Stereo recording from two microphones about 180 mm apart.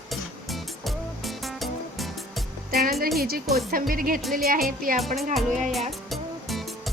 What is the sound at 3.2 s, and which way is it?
A woman's voice, 60° right (ahead or behind).